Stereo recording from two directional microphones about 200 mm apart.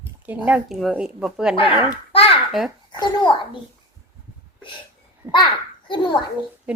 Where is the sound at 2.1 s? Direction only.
30° left (ahead or behind).